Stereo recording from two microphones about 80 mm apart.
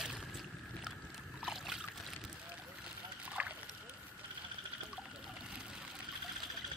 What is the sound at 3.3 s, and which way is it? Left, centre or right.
Rowboat, centre.